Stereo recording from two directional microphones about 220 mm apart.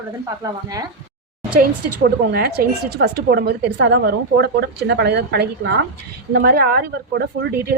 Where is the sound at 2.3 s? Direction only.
45° right (ahead or behind).